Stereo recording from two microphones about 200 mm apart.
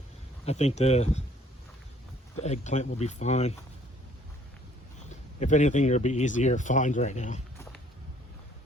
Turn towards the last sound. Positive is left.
turn(degrees=35)  # may be behind; listen again after turning